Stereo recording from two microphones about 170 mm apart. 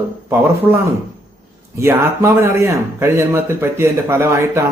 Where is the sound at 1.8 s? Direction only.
15° right (ahead or behind).